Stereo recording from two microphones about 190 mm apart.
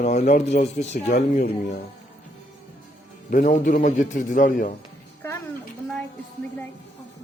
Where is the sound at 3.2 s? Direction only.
40° left (ahead or behind).